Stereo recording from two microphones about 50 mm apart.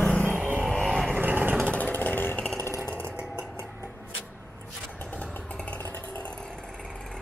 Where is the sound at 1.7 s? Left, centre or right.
Left.